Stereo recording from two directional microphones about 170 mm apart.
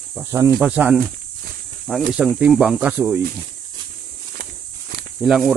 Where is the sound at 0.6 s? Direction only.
5° right (ahead or behind).